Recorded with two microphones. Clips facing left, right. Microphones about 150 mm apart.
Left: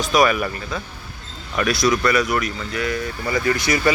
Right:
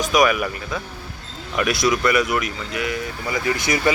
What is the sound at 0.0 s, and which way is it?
Speech, 15° right (ahead or behind).